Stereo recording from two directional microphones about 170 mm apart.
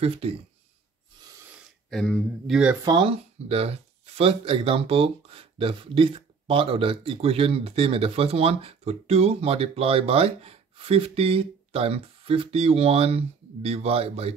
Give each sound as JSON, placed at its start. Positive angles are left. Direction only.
{"t": 0.0, "sound": "speech", "side_deg": -35}
{"t": 1.6, "sound": "speech", "side_deg": 5}
{"t": 2.8, "sound": "speech", "side_deg": -25}